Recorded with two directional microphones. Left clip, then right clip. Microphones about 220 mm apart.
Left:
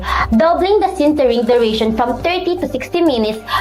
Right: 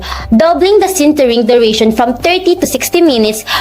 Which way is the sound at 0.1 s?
45° right (ahead or behind).